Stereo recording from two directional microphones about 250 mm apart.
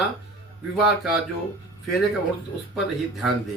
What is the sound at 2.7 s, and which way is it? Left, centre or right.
Speech, centre.